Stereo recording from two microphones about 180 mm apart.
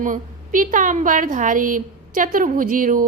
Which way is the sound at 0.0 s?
45° right (ahead or behind).